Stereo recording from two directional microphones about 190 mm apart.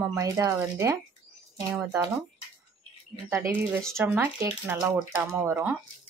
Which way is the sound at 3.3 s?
15° right (ahead or behind).